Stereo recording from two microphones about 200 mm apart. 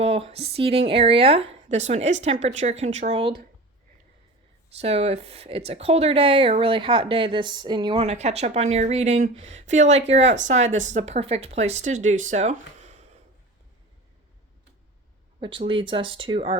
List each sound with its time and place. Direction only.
0.0 s speech: 30° right (ahead or behind)
4.8 s speech: 30° right (ahead or behind)
15.4 s speech: 25° right (ahead or behind)